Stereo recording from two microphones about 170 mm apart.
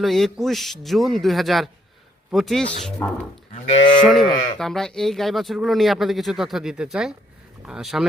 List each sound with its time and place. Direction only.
0.0 s speech: centre (ahead or behind)
3.0 s speech: 15° left (ahead or behind)
3.5 s cattle: 45° left (ahead or behind)
4.1 s speech: centre (ahead or behind)